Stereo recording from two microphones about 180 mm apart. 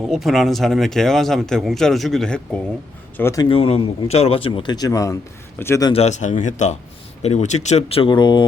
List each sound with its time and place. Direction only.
0.0 s speech: centre (ahead or behind); by 3.4 s 15° left (ahead or behind)
3.5 s a man's voice: 30° left (ahead or behind); by 5.9 s 15° left (ahead or behind)
5.9 s a man's voice: 35° left (ahead or behind)